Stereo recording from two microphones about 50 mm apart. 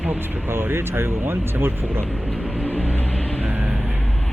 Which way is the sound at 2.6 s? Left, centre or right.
Left.